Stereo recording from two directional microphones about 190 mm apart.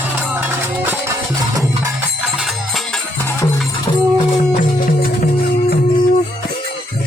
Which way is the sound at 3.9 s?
30° left (ahead or behind).